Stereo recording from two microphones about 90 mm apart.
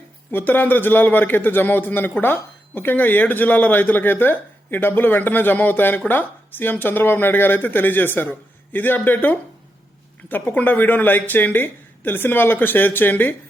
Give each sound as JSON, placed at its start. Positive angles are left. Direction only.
{"t": 0.3, "sound": "a man's voice", "side_deg": 25}